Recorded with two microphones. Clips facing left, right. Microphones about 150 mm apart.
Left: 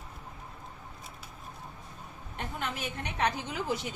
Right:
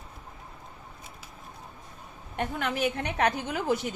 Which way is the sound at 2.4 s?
70° right (ahead or behind).